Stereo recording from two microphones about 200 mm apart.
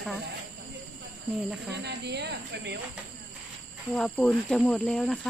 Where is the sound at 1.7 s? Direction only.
60° right (ahead or behind).